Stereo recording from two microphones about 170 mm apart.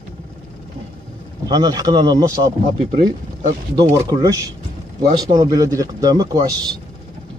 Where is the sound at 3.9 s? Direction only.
20° right (ahead or behind).